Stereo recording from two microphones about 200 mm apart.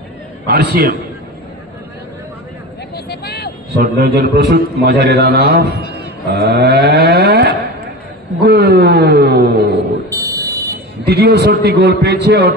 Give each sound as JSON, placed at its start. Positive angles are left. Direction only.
{"t": 0.5, "sound": "a man's voice", "side_deg": -50}
{"t": 3.1, "sound": "a sound", "side_deg": 55}
{"t": 3.7, "sound": "a man's voice", "side_deg": -50}
{"t": 5.9, "sound": "cattle", "side_deg": -55}
{"t": 8.4, "sound": "a man's voice", "side_deg": -55}
{"t": 10.2, "sound": "buzzer", "side_deg": -15}
{"t": 10.7, "sound": "a man's voice", "side_deg": -55}